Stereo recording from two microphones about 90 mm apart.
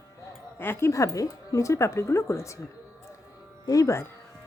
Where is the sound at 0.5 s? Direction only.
25° left (ahead or behind).